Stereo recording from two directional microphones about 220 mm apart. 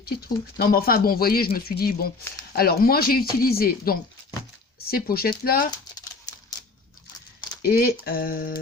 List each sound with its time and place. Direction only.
0.5 s speech: 40° left (ahead or behind)
7.6 s speech: 45° left (ahead or behind)